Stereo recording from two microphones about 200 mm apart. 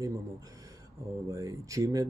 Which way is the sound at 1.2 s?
15° right (ahead or behind).